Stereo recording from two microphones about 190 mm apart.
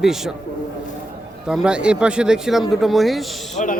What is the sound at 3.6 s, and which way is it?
Speech, 40° left (ahead or behind).